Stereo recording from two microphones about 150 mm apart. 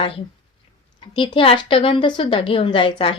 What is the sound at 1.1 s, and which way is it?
A woman's voice, 35° left (ahead or behind).